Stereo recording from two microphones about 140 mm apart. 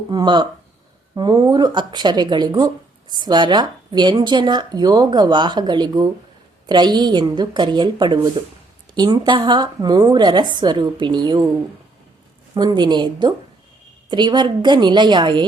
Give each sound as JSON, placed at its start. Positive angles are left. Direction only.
{"t": 0.1, "sound": "speech", "side_deg": -30}
{"t": 12.5, "sound": "speech", "side_deg": -30}